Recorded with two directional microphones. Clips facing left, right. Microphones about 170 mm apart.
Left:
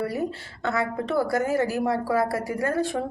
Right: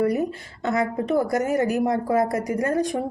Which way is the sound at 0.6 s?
20° right (ahead or behind).